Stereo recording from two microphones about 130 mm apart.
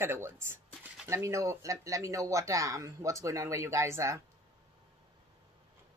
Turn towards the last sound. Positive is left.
turn(degrees=-20)  # may be behind; listen again after turning